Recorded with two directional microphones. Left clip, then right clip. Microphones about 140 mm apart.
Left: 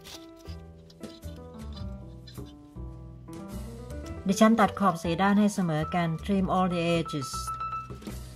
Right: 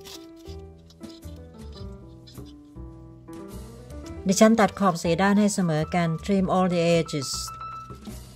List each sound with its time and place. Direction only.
4.3 s speech: 35° right (ahead or behind)